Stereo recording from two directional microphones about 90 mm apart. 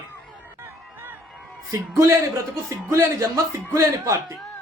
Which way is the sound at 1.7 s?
35° right (ahead or behind).